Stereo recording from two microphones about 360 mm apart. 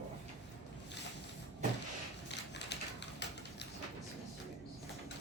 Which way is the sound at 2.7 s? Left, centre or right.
Left.